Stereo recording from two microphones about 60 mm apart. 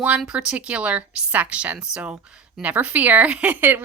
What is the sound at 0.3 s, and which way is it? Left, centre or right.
Speech, centre.